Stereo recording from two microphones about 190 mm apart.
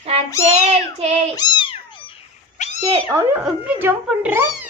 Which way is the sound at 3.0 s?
10° right (ahead or behind).